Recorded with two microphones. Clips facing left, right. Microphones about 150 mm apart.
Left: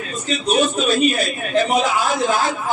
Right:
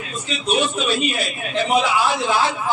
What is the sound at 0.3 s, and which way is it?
A man's voice, 40° left (ahead or behind).